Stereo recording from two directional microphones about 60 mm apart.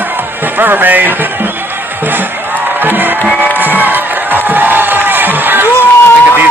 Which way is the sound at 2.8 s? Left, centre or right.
Right.